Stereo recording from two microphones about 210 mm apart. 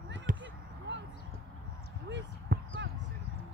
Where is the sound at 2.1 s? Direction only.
55° right (ahead or behind).